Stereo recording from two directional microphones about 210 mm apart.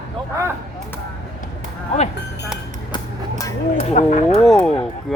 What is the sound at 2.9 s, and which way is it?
Music, 20° left (ahead or behind).